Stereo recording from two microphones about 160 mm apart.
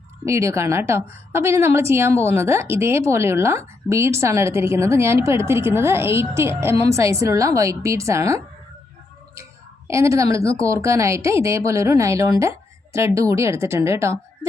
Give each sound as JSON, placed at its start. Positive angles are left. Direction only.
{"t": 0.3, "sound": "a woman's voice", "side_deg": -15}
{"t": 9.3, "sound": "a sound", "side_deg": -20}
{"t": 10.6, "sound": "a woman's voice", "side_deg": -20}